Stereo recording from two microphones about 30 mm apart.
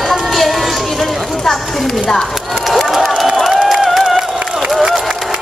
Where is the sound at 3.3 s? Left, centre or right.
Centre.